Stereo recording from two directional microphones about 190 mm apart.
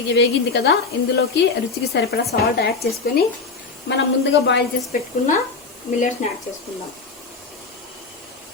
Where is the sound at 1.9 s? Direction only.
55° left (ahead or behind).